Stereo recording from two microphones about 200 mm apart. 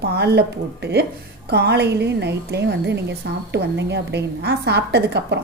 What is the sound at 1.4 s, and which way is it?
A woman's voice, 55° right (ahead or behind).